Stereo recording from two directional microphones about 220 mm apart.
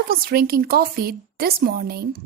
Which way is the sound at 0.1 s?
45° right (ahead or behind).